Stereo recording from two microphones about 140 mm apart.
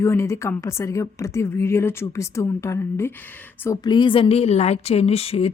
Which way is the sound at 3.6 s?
30° left (ahead or behind).